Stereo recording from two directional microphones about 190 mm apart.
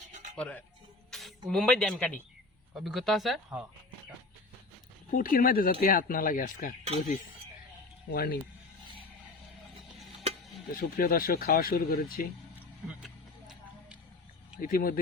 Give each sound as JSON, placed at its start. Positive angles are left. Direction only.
{"t": 0.1, "sound": "music", "side_deg": -40}
{"t": 0.3, "sound": "speech", "side_deg": 5}
{"t": 5.1, "sound": "speech", "side_deg": 45}
{"t": 8.1, "sound": "speech", "side_deg": 55}
{"t": 10.8, "sound": "speech", "side_deg": 50}
{"t": 12.5, "sound": "vehicle", "side_deg": -5}
{"t": 14.6, "sound": "speech", "side_deg": 50}